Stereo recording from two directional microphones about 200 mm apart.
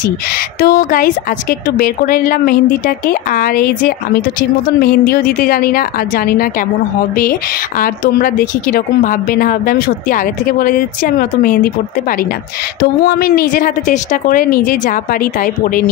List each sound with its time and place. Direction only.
0.6 s speech: 45° left (ahead or behind)
13.0 s speech: 50° left (ahead or behind)